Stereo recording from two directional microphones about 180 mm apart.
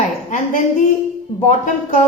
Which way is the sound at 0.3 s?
40° left (ahead or behind).